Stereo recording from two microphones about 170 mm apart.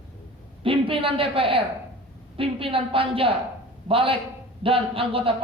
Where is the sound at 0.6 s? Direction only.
30° right (ahead or behind).